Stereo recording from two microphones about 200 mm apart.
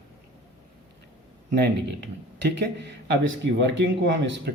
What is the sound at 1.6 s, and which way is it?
Speech, 60° right (ahead or behind).